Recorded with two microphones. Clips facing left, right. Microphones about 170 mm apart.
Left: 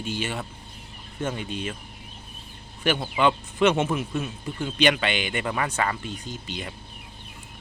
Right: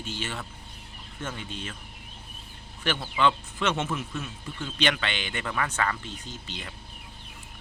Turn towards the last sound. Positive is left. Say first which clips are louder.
# left 5 dB
turn(degrees=15)  # may be behind; listen again after turning